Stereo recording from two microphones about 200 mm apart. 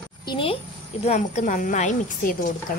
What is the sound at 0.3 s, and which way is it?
A woman's voice, 25° left (ahead or behind).